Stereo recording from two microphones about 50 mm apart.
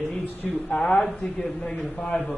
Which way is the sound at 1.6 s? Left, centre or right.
Left.